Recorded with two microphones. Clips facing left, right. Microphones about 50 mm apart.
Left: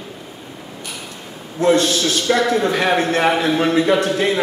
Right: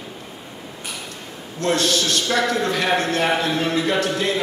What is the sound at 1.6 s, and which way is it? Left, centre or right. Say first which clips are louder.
Speech: left 7 dB; centre.